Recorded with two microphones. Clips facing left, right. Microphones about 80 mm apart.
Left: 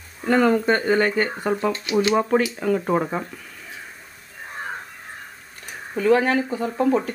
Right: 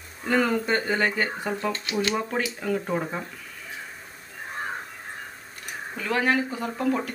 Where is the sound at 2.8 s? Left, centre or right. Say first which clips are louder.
Left 6 dB; left.